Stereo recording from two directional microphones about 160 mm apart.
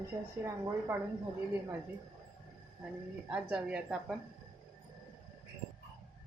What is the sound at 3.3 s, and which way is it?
Speech, 5° right (ahead or behind).